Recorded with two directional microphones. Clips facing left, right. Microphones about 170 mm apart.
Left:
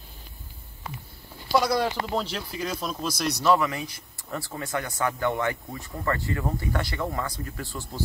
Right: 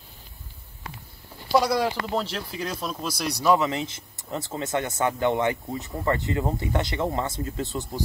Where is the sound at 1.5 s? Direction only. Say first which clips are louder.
Right 1 dB; 10° right (ahead or behind).